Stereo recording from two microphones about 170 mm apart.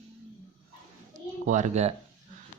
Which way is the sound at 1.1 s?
45° right (ahead or behind).